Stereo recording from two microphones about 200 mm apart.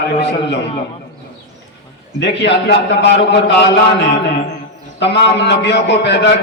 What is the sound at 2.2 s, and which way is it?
A man's voice, 60° left (ahead or behind).